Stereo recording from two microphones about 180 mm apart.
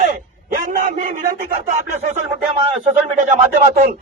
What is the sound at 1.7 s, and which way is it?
Speech, 40° right (ahead or behind).